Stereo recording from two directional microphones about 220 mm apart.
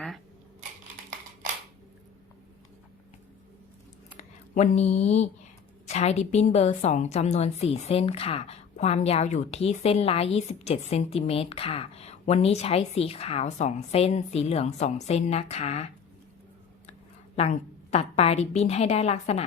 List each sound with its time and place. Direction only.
4.2 s a woman's voice: 30° left (ahead or behind)
17.3 s a woman's voice: 30° left (ahead or behind)